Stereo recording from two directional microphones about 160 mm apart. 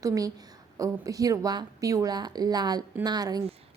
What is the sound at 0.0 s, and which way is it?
A woman's voice, 20° right (ahead or behind).